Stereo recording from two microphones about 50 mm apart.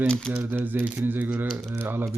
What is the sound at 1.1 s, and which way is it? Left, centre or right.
Speech, right.